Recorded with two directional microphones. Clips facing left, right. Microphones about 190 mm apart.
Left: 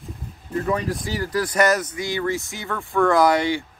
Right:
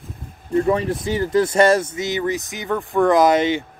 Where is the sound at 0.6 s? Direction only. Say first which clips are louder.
Right 5 dB; 25° right (ahead or behind).